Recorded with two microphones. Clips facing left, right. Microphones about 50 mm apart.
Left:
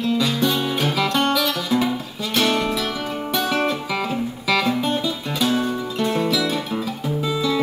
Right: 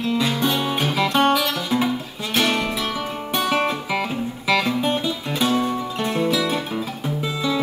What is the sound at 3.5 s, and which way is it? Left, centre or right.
Music, centre.